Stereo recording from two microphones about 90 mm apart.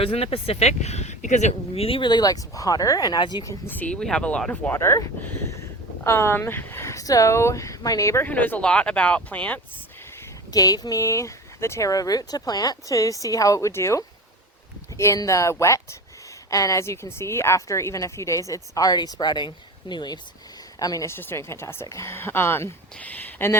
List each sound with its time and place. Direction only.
0.0 s speech: 90° left
1.7 s speech: 90° left
2.0 s speech: 50° left (ahead or behind)
3.7 s speech: 15° left (ahead or behind)
4.7 s a woman's voice: 30° left (ahead or behind)
8.2 s speech: 20° left (ahead or behind)
10.5 s a woman's voice: 45° left (ahead or behind)
20.7 s a woman's voice: 40° left (ahead or behind)
21.1 s speech: 25° left (ahead or behind)